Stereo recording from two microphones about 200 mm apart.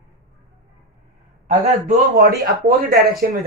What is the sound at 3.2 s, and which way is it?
Speech, 50° right (ahead or behind).